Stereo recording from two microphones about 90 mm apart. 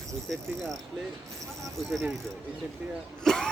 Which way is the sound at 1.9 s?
Centre (ahead or behind).